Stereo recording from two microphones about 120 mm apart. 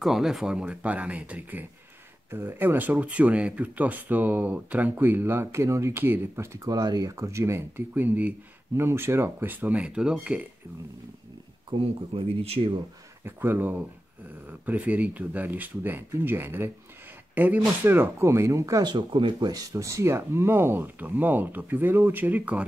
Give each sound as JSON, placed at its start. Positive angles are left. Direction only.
{"t": 0.0, "sound": "speech", "side_deg": -5}
{"t": 11.7, "sound": "speech", "side_deg": -40}
{"t": 13.2, "sound": "speech", "side_deg": -15}